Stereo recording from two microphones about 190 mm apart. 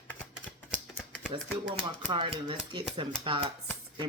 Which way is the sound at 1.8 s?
25° right (ahead or behind).